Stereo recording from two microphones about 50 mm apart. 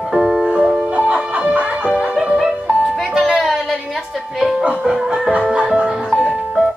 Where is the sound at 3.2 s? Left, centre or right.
Centre.